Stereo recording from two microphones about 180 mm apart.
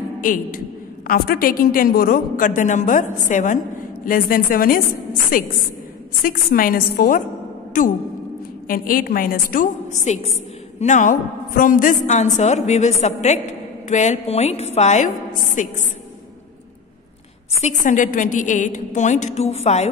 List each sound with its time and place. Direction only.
0.2 s a man's voice: 50° left (ahead or behind)
8.6 s a woman's voice: 50° left (ahead or behind)
17.6 s a woman's voice: 40° left (ahead or behind)